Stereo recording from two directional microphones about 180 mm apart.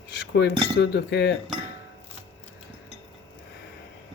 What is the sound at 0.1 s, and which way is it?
Cutlery, 70° left (ahead or behind).